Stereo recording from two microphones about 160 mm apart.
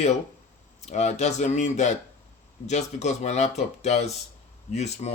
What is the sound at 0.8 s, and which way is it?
Speech, 45° left (ahead or behind).